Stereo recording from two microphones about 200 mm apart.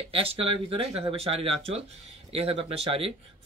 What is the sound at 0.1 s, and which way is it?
Speech, 30° right (ahead or behind).